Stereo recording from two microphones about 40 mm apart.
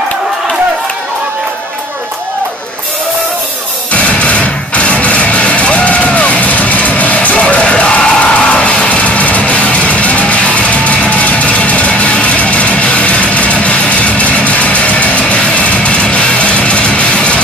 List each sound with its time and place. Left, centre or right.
3.9 s music: left